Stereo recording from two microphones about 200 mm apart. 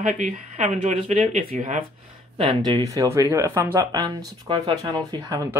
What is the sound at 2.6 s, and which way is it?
Speech, 20° right (ahead or behind).